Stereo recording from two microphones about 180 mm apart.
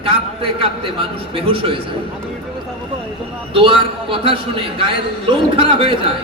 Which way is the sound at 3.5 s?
30° right (ahead or behind).